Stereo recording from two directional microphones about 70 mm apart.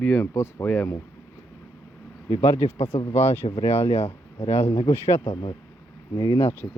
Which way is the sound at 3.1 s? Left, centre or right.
Left.